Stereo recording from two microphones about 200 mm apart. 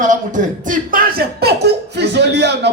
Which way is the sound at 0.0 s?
40° right (ahead or behind).